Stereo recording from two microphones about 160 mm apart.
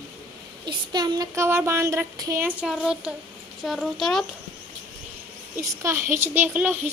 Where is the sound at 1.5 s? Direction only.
15° right (ahead or behind).